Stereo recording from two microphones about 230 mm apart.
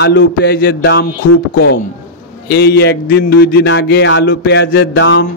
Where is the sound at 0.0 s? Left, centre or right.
Left.